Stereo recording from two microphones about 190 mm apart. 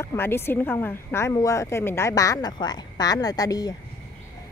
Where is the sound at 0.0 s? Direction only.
10° left (ahead or behind).